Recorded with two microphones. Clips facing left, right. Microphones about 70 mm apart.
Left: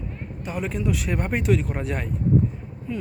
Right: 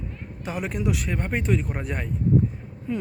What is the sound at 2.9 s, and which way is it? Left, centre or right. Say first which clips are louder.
Speech: right 2 dB; right.